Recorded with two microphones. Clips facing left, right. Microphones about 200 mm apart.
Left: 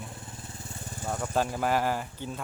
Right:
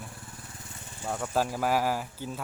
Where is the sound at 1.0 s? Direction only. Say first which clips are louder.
Even; 5° right (ahead or behind).